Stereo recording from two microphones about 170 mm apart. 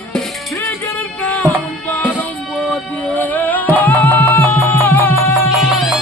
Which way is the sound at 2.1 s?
5° left (ahead or behind).